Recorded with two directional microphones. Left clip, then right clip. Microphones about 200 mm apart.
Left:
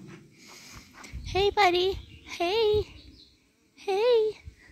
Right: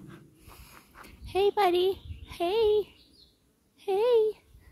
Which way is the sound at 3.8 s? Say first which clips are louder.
Left 1 dB; 5° right (ahead or behind).